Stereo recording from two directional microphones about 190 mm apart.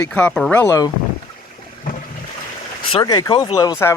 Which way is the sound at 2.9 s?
20° left (ahead or behind).